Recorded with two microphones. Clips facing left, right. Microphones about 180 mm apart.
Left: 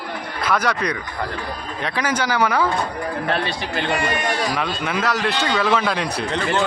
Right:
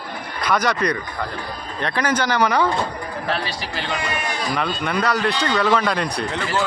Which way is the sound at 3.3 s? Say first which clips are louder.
Left 1 dB; 55° left (ahead or behind).